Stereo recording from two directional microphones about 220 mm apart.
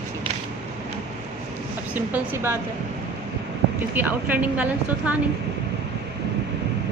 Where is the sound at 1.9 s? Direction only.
10° right (ahead or behind).